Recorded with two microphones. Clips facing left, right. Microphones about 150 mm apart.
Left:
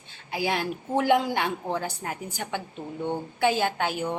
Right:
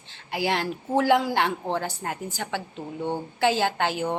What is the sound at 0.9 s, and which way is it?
A woman's voice, 20° left (ahead or behind).